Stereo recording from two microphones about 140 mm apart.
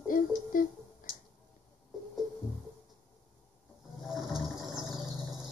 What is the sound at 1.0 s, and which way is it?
Tick-tock, 80° left.